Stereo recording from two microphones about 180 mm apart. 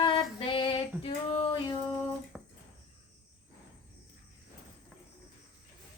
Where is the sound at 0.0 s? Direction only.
30° left (ahead or behind).